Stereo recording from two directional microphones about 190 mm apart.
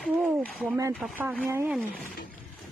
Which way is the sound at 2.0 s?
50° left (ahead or behind).